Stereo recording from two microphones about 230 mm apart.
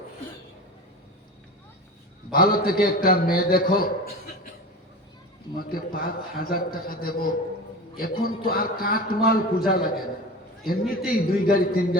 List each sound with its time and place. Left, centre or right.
2.3 s a man's voice: left
5.5 s a man's voice: left